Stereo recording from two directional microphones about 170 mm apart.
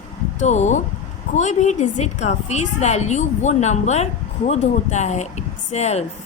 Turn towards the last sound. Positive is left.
turn(degrees=40)  # may be behind; listen again after turning